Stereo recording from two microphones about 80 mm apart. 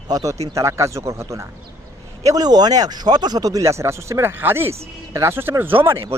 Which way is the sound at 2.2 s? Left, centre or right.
Right.